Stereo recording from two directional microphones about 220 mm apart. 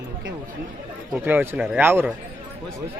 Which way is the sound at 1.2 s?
10° right (ahead or behind).